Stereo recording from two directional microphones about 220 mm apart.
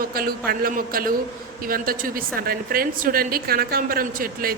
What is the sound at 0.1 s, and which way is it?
A man's voice, 45° right (ahead or behind).